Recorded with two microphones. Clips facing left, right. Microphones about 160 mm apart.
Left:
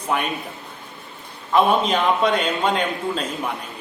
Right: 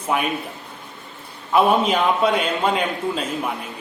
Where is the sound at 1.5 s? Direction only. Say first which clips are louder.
Right 1 dB; 10° right (ahead or behind).